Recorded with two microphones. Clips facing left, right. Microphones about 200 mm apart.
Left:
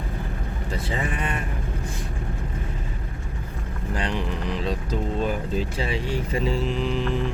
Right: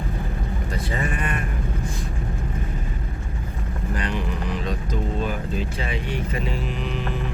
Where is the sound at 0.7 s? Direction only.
25° left (ahead or behind).